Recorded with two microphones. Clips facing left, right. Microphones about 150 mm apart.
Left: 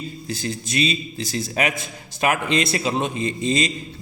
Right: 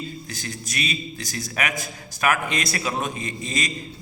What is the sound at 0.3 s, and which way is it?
A man's voice, 30° left (ahead or behind).